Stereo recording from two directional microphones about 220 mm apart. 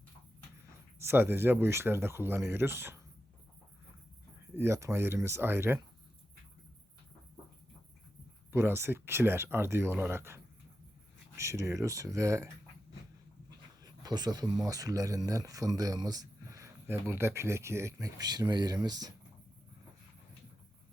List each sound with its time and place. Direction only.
0.9 s speech: 10° right (ahead or behind)
4.5 s speech: 10° right (ahead or behind)
8.5 s speech: 10° right (ahead or behind)
13.8 s speech: 20° right (ahead or behind)